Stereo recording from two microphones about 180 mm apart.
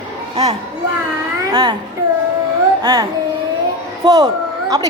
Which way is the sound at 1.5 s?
25° right (ahead or behind).